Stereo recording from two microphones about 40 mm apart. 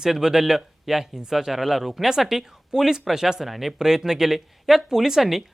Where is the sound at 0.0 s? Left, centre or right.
Centre.